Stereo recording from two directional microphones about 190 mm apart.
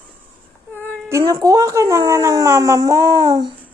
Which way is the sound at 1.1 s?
20° right (ahead or behind).